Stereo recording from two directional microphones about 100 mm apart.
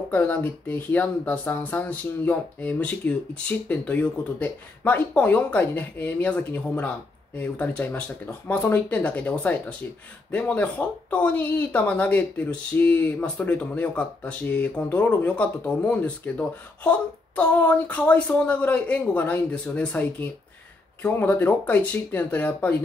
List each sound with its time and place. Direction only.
0.1 s speech: 20° left (ahead or behind)